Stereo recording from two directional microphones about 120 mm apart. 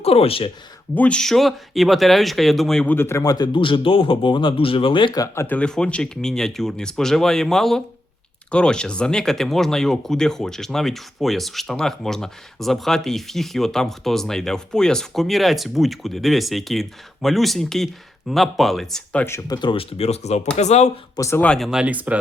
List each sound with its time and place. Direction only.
0.0 s speech: 55° left (ahead or behind)
0.9 s speech: 10° left (ahead or behind)
2.8 s a man's voice: 20° left (ahead or behind); by 5.2 s 40° left (ahead or behind)
5.2 s speech: 20° left (ahead or behind)
5.5 s speech: 10° left (ahead or behind)
19.5 s speech: 45° left (ahead or behind); by 20.9 s 70° left (ahead or behind)
21.2 s speech: 25° left (ahead or behind)
21.4 s speech: 5° left (ahead or behind)
21.7 s speech: 10° right (ahead or behind)